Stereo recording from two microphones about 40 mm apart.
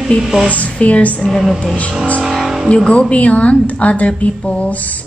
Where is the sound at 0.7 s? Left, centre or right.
Left.